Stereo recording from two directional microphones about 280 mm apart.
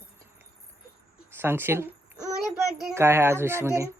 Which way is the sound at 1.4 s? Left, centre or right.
Centre.